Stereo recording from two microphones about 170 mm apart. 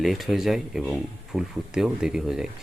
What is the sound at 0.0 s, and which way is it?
Speech, centre (ahead or behind).